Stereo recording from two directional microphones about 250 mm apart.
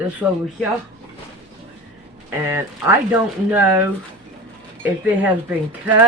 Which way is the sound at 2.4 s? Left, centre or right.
Centre.